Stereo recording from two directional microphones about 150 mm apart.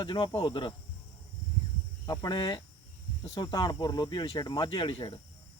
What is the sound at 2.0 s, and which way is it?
Speech, 25° left (ahead or behind).